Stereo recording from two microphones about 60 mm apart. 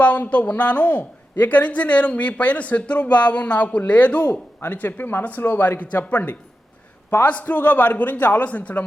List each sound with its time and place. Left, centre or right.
0.0 s speech: left
4.6 s speech: left